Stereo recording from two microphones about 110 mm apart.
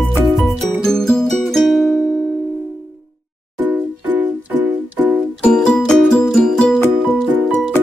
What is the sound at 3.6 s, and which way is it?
Music, 15° right (ahead or behind).